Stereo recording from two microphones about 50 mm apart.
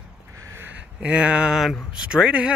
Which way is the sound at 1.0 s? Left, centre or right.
Right.